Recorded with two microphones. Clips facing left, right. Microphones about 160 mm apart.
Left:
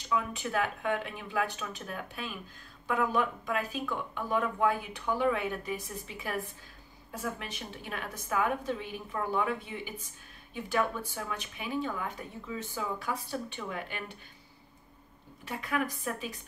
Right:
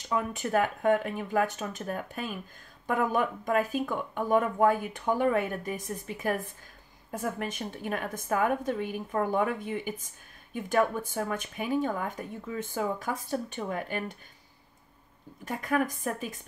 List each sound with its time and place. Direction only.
0.1 s speech: 45° right (ahead or behind)
15.4 s speech: 45° right (ahead or behind)